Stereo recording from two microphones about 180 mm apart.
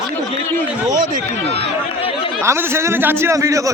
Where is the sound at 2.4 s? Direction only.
15° right (ahead or behind).